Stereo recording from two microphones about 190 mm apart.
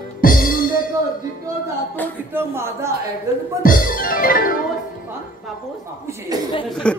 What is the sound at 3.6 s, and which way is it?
Music, 50° left (ahead or behind).